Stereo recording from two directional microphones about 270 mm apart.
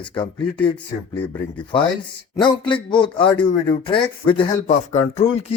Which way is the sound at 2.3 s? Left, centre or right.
Centre.